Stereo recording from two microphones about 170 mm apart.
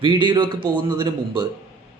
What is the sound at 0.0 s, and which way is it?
A man's voice, 30° right (ahead or behind).